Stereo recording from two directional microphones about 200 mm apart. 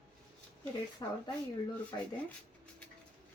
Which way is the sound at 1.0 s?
20° left (ahead or behind).